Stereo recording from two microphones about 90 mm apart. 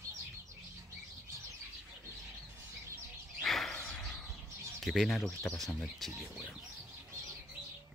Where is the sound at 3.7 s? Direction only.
15° left (ahead or behind).